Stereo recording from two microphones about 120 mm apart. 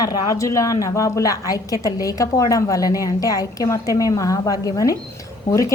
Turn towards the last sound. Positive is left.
turn(degrees=25)  # may be behind; listen again after turning